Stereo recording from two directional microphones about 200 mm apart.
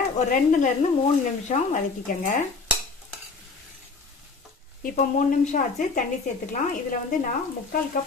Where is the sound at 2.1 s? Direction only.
40° left (ahead or behind).